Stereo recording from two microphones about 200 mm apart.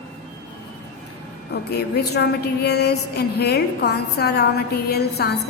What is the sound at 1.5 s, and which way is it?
A woman's voice, 55° left (ahead or behind).